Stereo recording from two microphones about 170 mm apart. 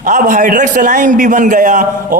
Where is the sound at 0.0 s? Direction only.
50° right (ahead or behind).